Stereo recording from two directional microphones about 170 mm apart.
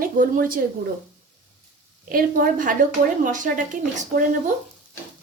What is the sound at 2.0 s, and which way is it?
A woman's voice, 55° right (ahead or behind).